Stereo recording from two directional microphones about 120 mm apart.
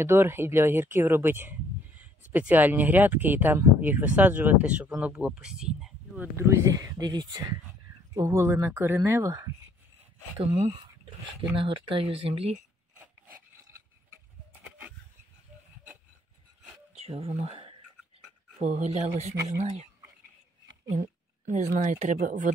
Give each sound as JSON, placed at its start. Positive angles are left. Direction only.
{"t": 0.0, "sound": "speech", "side_deg": -20}
{"t": 6.1, "sound": "speech", "side_deg": -20}
{"t": 8.1, "sound": "speech", "side_deg": -25}
{"t": 10.4, "sound": "speech", "side_deg": -60}
{"t": 11.5, "sound": "speech", "side_deg": -45}
{"t": 16.9, "sound": "a sound", "side_deg": -60}
{"t": 18.6, "sound": "speech", "side_deg": -70}
{"t": 20.9, "sound": "speech", "side_deg": -75}